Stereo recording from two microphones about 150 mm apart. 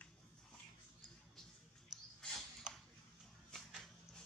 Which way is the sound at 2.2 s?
5° left (ahead or behind).